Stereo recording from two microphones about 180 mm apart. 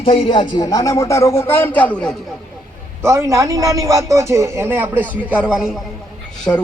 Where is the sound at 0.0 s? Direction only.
30° left (ahead or behind); by 2.1 s 5° left (ahead or behind).